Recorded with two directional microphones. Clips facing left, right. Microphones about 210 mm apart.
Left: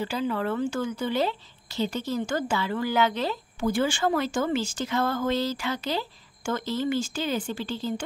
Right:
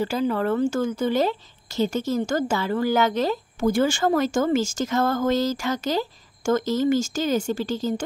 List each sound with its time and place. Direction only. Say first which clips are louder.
0.0 s speech: right 5 dB; 45° right (ahead or behind)